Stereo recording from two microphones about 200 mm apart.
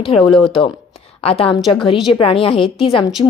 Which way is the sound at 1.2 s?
30° left (ahead or behind).